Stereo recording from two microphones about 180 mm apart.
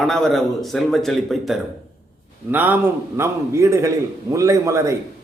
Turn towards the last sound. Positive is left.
turn(degrees=-15)  # may be behind; listen again after turning